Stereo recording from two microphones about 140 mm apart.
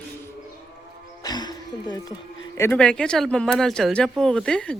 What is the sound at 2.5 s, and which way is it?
Speech, 15° left (ahead or behind).